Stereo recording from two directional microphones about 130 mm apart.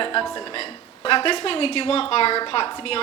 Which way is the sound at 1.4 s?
50° left (ahead or behind).